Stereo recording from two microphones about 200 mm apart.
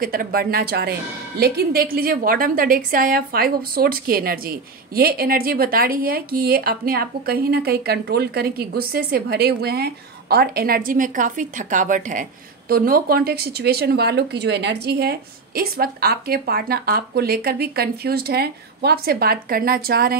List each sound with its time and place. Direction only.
0.0 s a woman's voice: 45° right (ahead or behind)